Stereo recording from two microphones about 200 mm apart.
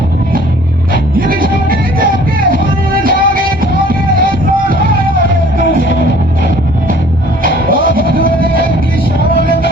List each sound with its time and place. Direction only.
1.1 s music: 45° right (ahead or behind)
7.4 s music: 45° right (ahead or behind)